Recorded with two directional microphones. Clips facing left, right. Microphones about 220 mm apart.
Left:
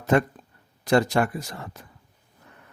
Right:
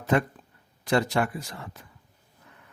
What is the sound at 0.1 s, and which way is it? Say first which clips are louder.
Speech: left 3 dB; 45° left (ahead or behind).